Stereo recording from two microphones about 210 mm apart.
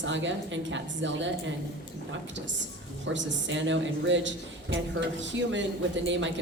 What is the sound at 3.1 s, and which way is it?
A woman's voice, 60° right (ahead or behind).